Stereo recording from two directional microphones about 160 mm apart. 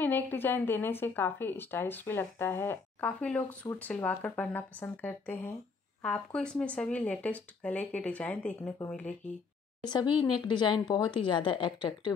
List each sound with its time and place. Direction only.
0.0 s speech: 10° left (ahead or behind)
9.8 s speech: 30° left (ahead or behind)